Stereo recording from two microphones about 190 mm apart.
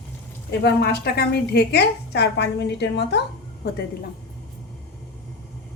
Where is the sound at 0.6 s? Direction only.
55° left (ahead or behind).